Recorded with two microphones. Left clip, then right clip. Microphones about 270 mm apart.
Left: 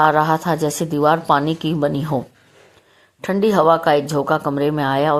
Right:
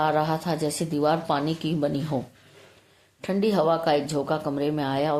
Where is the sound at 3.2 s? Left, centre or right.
Left.